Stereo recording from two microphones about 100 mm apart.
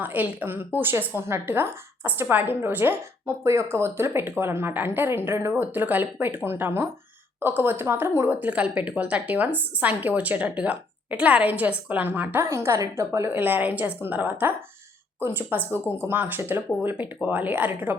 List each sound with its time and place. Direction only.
0.0 s a woman's voice: 15° right (ahead or behind)